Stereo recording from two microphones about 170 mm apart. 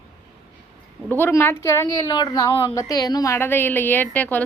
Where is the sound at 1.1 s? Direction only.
10° left (ahead or behind).